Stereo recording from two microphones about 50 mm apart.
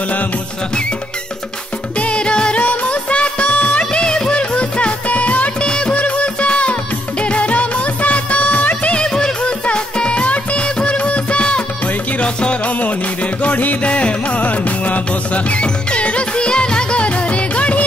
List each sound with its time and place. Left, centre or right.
2.0 s music: left
2.6 s music: left
9.0 s music: centre